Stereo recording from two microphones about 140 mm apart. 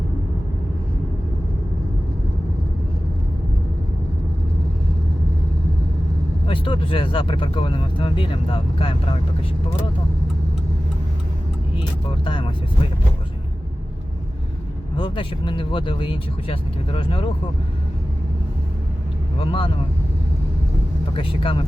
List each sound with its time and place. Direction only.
6.5 s speech: 40° left (ahead or behind)
12.2 s speech: 35° left (ahead or behind)
14.9 s speech: 35° left (ahead or behind)
19.4 s speech: 40° left (ahead or behind)
21.1 s speech: 40° left (ahead or behind)